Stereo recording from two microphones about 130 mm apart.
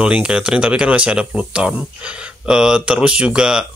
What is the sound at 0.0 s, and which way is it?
Speech, 10° right (ahead or behind).